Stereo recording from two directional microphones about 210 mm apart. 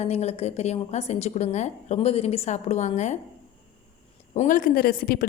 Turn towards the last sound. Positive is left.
turn(degrees=45)  # may be behind; listen again after turning